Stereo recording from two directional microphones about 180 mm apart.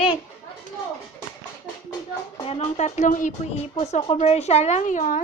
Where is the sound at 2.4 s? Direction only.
35° left (ahead or behind).